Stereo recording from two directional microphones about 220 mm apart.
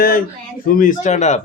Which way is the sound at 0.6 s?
40° left (ahead or behind).